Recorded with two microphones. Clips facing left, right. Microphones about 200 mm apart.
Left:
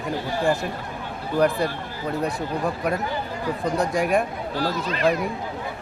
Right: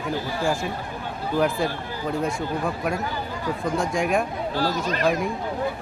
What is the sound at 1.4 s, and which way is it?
Speech, centre (ahead or behind).